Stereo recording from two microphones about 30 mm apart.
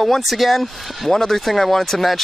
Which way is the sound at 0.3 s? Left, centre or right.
Centre.